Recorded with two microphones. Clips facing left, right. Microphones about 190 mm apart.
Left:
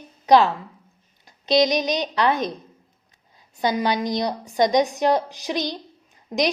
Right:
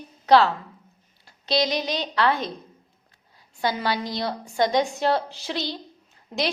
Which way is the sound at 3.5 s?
15° left (ahead or behind).